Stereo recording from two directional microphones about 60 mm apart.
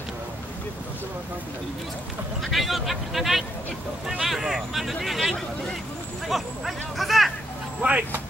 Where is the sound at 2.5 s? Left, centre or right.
Centre.